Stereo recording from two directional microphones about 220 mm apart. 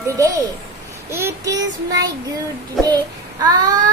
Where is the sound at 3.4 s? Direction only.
15° right (ahead or behind).